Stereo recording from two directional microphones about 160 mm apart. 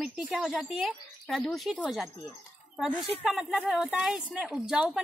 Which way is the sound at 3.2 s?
Centre (ahead or behind).